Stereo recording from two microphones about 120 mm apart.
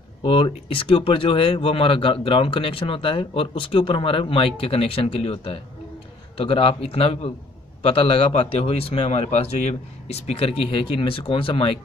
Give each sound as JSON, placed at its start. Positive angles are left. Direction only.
{"t": 0.2, "sound": "speech", "side_deg": 50}